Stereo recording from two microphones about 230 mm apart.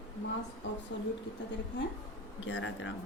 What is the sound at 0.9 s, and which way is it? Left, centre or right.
Speech, left.